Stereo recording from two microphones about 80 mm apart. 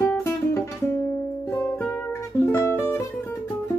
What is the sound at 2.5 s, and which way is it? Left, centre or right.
Music, left.